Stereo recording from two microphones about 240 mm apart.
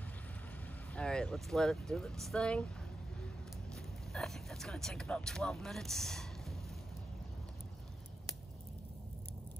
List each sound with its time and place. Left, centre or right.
0.9 s speech: centre
3.7 s vehicle: centre